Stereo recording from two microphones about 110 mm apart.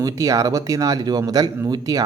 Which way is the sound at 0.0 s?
30° right (ahead or behind).